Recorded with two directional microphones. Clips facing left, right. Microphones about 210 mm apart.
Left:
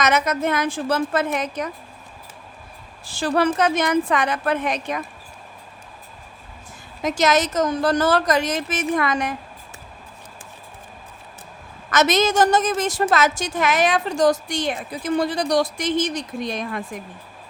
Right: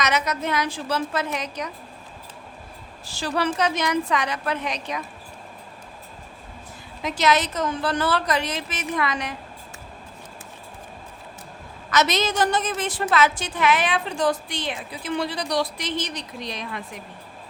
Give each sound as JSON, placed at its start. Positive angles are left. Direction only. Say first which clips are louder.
{"t": 0.0, "sound": "a woman's voice", "louder": "left 4 dB", "side_deg": 50}
{"t": 3.1, "sound": "a woman's voice", "louder": "left 5 dB", "side_deg": 55}
{"t": 7.0, "sound": "a woman's voice", "louder": "left 3 dB", "side_deg": 45}
{"t": 11.9, "sound": "a woman's voice", "louder": "left 4 dB", "side_deg": 50}